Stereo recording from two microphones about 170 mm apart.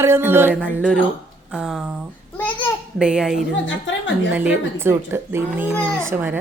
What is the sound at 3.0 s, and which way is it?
Speech, 5° right (ahead or behind).